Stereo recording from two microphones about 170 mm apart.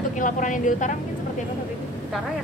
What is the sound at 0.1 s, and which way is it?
Speech, 50° left (ahead or behind).